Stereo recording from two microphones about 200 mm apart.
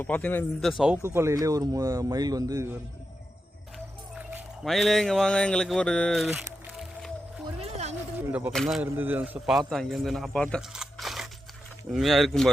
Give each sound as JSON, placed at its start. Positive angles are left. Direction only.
{"t": 0.0, "sound": "a man's voice", "side_deg": 10}
{"t": 0.8, "sound": "speech", "side_deg": -10}
{"t": 4.1, "sound": "speech", "side_deg": -5}
{"t": 6.7, "sound": "music", "side_deg": 0}
{"t": 7.4, "sound": "music", "side_deg": -30}
{"t": 8.3, "sound": "speech", "side_deg": -10}